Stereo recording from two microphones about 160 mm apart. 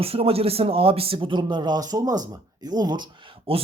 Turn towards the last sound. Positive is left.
turn(degrees=-35)  # may be behind; listen again after turning